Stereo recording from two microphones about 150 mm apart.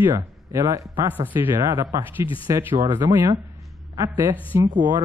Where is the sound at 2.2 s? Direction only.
35° left (ahead or behind).